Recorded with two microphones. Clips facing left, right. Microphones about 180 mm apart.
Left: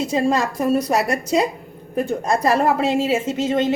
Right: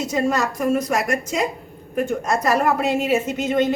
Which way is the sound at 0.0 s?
30° left (ahead or behind).